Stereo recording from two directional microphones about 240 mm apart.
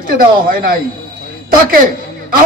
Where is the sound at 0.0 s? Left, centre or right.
Right.